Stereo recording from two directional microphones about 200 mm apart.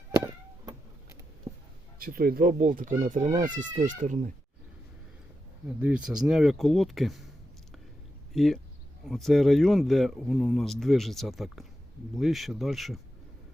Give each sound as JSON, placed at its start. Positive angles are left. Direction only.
{"t": 0.2, "sound": "a sound", "side_deg": -15}
{"t": 2.0, "sound": "speech", "side_deg": -45}
{"t": 5.6, "sound": "speech", "side_deg": -5}
{"t": 8.3, "sound": "speech", "side_deg": 0}